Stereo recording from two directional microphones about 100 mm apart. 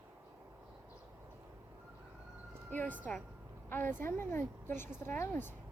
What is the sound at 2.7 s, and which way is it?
A woman's voice, 15° left (ahead or behind).